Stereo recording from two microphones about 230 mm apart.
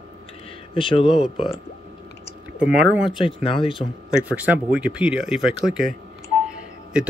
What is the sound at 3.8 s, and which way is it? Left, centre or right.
Speech, centre.